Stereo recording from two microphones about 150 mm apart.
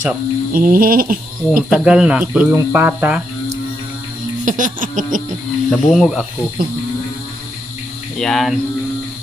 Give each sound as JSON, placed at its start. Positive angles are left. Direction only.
{"t": 0.5, "sound": "sheep", "side_deg": -70}
{"t": 1.7, "sound": "speech", "side_deg": -5}
{"t": 4.5, "sound": "a sound", "side_deg": -60}
{"t": 5.7, "sound": "speech", "side_deg": 0}
{"t": 8.2, "sound": "speech", "side_deg": 0}